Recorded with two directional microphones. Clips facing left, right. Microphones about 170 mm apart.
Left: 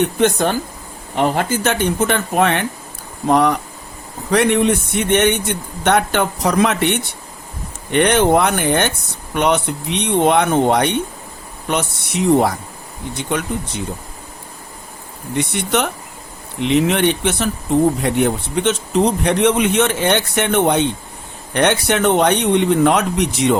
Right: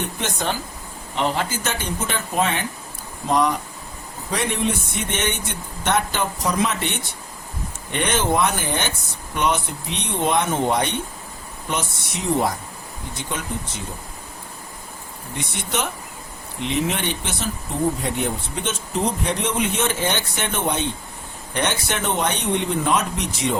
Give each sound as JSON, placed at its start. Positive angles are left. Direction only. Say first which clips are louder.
{"t": 0.0, "sound": "a man's voice", "louder": "left 11 dB", "side_deg": 55}
{"t": 15.4, "sound": "a man's voice", "louder": "left 8 dB", "side_deg": 65}